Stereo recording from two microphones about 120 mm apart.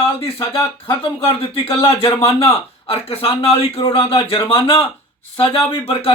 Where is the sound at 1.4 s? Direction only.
55° left (ahead or behind).